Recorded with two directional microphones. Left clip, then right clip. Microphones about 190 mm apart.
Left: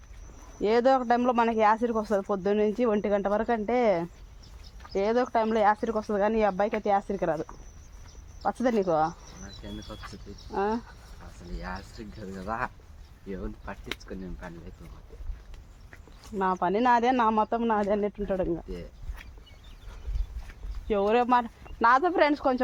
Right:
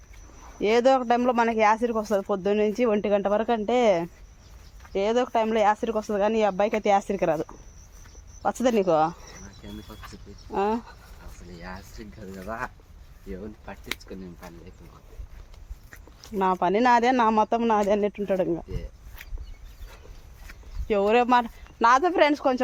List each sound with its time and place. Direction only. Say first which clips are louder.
0.6 s speech: right 3 dB; 15° right (ahead or behind)
4.9 s speech: right 2 dB; centre (ahead or behind)
6.6 s speech: right 4 dB; 25° right (ahead or behind)
9.6 s speech: left 1 dB; 25° left (ahead or behind)
10.5 s speech: right 3 dB; 25° right (ahead or behind)
11.6 s speech: left 2 dB; 30° left (ahead or behind)
12.5 s speech: left 1 dB; 45° left (ahead or behind)
13.7 s speech: left 3 dB; 20° left (ahead or behind)
14.0 s speech: even; 10° left (ahead or behind)
16.4 s speech: right 3 dB; 30° right (ahead or behind)
20.5 s speech: right 3 dB; 25° right (ahead or behind)